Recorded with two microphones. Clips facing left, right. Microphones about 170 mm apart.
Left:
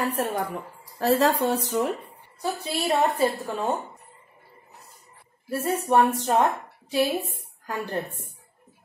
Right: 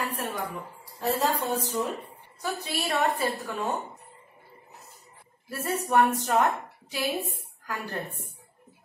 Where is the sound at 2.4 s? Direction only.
30° left (ahead or behind).